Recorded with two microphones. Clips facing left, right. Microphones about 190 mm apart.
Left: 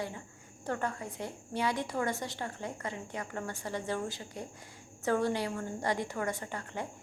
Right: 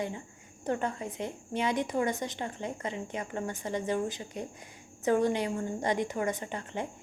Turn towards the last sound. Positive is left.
turn(degrees=-20)  # may be behind; listen again after turning